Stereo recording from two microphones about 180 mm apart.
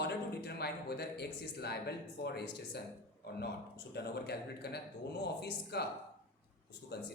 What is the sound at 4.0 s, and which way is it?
A man's voice, 65° left (ahead or behind).